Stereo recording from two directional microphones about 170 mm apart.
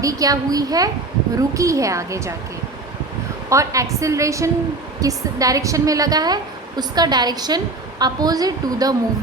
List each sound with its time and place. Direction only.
0.0 s a woman's voice: 20° right (ahead or behind)
3.5 s a woman's voice: 20° right (ahead or behind)